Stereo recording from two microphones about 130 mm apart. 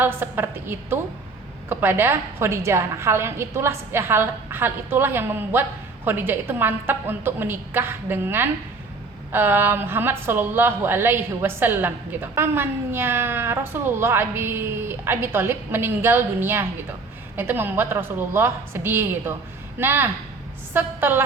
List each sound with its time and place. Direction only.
0.0 s a woman's voice: 15° right (ahead or behind)